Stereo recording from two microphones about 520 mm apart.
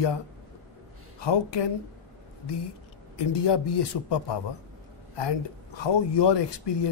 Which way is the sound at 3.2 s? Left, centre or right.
Left.